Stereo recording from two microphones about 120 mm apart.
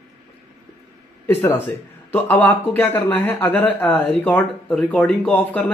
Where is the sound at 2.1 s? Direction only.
15° left (ahead or behind).